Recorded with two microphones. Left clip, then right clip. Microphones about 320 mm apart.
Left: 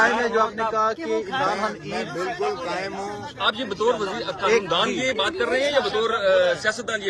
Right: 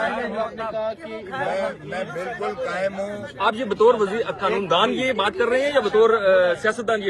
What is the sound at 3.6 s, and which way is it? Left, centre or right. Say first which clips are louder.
A man's voice: right 5 dB; right.